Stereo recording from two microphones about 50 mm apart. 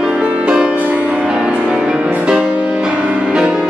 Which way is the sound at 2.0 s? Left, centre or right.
Right.